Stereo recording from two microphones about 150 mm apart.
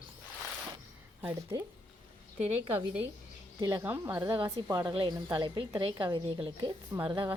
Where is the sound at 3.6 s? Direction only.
25° right (ahead or behind).